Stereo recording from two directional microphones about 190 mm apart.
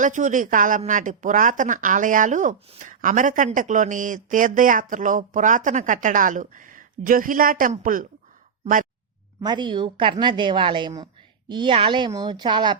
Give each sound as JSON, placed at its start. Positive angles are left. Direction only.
{"t": 0.0, "sound": "speech", "side_deg": -40}
{"t": 9.4, "sound": "a woman's voice", "side_deg": -25}